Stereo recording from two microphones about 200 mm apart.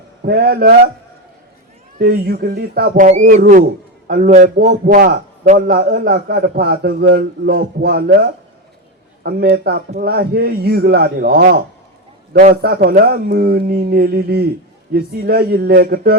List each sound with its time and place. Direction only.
0.2 s a man's voice: 50° right (ahead or behind)
2.0 s a man's voice: 50° right (ahead or behind)